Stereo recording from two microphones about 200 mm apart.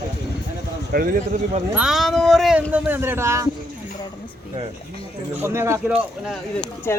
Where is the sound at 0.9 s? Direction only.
40° right (ahead or behind).